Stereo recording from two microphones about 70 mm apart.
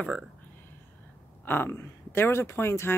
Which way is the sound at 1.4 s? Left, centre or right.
Left.